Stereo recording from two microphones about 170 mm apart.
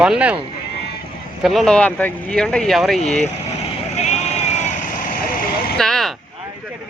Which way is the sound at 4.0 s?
40° left (ahead or behind).